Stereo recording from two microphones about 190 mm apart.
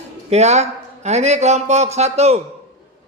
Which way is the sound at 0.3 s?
35° right (ahead or behind).